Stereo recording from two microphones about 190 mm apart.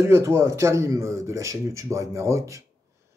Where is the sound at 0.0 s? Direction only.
15° right (ahead or behind).